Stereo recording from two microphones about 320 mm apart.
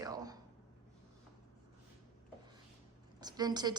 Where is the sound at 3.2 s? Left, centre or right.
Centre.